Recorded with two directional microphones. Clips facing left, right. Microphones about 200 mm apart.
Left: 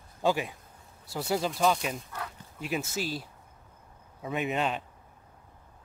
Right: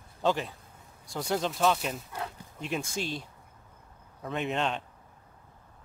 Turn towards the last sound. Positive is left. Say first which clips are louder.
# left 1 dB
turn(degrees=5)  # may be behind; listen again after turning